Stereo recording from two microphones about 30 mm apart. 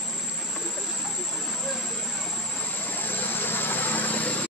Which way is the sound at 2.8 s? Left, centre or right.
Left.